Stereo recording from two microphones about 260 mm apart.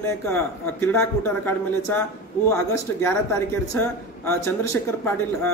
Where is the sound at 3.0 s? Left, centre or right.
Centre.